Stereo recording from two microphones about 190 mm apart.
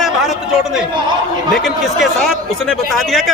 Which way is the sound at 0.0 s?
Centre (ahead or behind).